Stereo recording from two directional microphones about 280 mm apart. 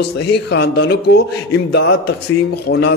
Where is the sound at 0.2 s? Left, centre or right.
Left.